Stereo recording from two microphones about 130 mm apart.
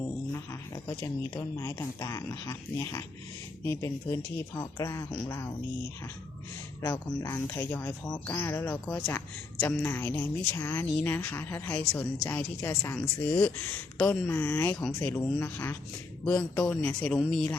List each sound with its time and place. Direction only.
0.9 s speech: 25° left (ahead or behind)
6.8 s speech: 20° left (ahead or behind)
14.0 s speech: 15° left (ahead or behind)